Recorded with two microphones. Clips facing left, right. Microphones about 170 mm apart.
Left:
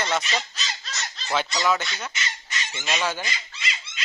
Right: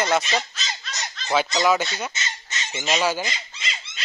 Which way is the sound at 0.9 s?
15° right (ahead or behind).